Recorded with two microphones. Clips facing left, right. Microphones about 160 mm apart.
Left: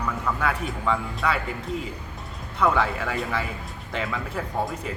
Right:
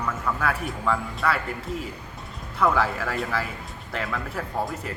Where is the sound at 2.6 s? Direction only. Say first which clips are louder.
Even; 5° right (ahead or behind).